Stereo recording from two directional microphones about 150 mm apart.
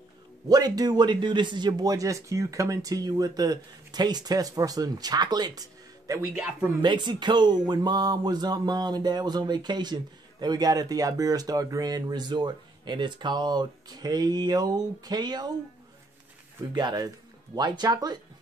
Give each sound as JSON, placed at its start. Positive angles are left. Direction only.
{"t": 0.5, "sound": "a man's voice", "side_deg": -25}
{"t": 6.8, "sound": "a man's voice", "side_deg": -30}
{"t": 16.7, "sound": "a man's voice", "side_deg": -30}